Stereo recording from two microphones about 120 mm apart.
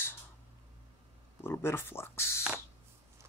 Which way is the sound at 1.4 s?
20° left (ahead or behind).